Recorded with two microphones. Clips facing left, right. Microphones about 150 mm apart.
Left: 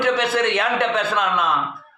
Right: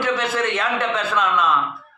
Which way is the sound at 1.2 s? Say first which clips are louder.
Right 1 dB; 50° left (ahead or behind).